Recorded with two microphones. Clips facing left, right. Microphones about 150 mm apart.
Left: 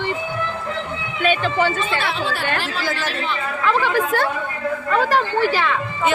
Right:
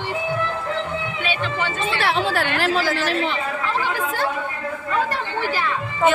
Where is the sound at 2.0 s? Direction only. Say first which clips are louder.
Right 3 dB; 80° right.